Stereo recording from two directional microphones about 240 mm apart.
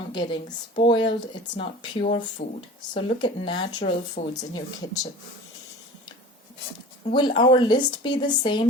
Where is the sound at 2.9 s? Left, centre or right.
Centre.